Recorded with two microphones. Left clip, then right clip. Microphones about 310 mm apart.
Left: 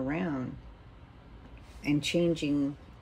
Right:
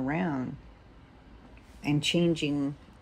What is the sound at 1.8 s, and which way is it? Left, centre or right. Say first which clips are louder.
Speech: right 1 dB; right.